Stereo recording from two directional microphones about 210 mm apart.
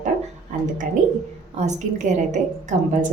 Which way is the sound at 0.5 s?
35° right (ahead or behind).